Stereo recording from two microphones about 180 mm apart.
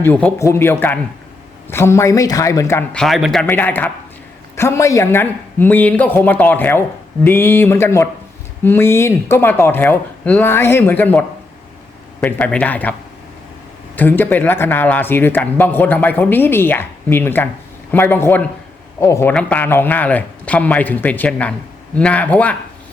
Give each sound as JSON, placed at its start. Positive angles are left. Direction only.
{"t": 0.0, "sound": "speech", "side_deg": 10}
{"t": 3.0, "sound": "a man's voice", "side_deg": 0}
{"t": 3.4, "sound": "speech", "side_deg": 10}
{"t": 13.9, "sound": "speech", "side_deg": 10}